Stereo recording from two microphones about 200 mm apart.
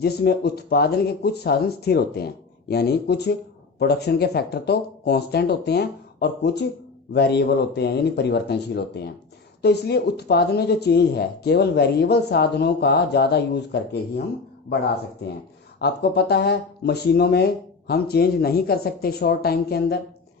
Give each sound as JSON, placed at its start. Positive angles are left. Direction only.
{"t": 0.0, "sound": "speech", "side_deg": 55}
{"t": 15.8, "sound": "speech", "side_deg": 55}